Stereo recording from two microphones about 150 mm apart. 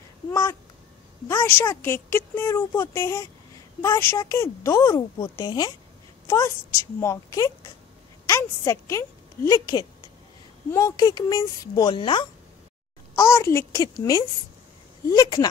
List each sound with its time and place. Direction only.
0.3 s a woman's voice: 20° left (ahead or behind)
13.1 s a woman's voice: 20° left (ahead or behind)
15.0 s a woman's voice: 25° left (ahead or behind)